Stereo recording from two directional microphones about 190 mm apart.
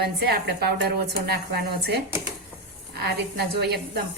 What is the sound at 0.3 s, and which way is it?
A woman's voice, 60° right (ahead or behind).